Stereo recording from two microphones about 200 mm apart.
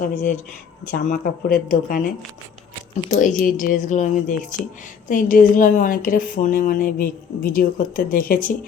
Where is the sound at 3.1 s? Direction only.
40° left (ahead or behind).